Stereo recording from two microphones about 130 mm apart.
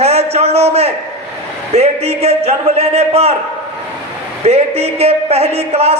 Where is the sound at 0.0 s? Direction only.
55° right (ahead or behind).